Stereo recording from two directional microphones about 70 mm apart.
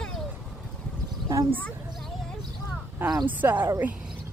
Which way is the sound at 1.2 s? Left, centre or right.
Right.